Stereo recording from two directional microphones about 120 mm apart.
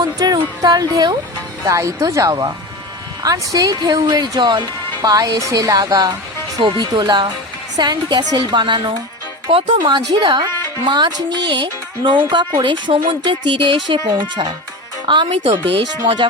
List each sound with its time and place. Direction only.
0.0 s music: 35° right (ahead or behind)
1.6 s speech: 30° right (ahead or behind)